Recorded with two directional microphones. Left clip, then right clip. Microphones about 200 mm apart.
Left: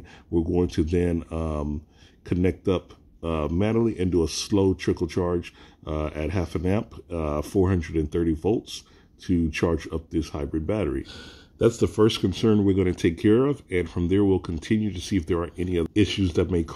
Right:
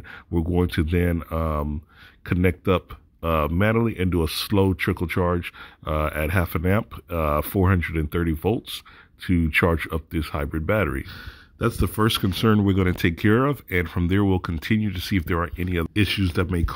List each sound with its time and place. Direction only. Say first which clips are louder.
0.6 s speech: right 2 dB; 20° right (ahead or behind)